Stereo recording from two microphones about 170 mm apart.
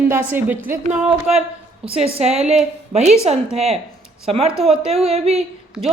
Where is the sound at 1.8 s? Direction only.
35° right (ahead or behind).